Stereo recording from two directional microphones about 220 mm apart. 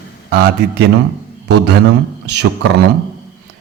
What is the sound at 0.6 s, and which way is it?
A man's voice, 50° right (ahead or behind).